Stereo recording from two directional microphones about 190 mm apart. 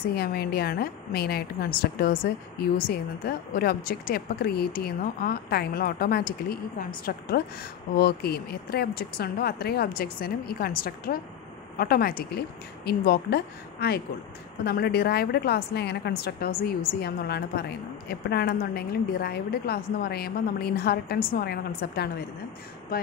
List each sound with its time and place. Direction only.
0.1 s a woman's voice: 55° left (ahead or behind)